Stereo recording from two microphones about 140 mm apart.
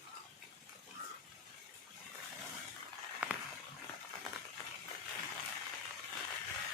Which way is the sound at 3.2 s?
10° right (ahead or behind).